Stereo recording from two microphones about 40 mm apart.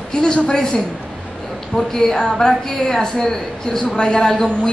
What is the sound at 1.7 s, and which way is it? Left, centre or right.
A woman's voice, centre.